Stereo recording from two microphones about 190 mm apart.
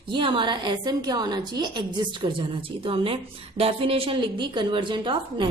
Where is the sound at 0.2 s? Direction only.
25° right (ahead or behind).